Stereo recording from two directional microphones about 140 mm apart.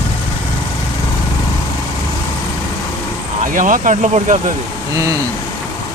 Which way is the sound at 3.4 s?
70° right (ahead or behind).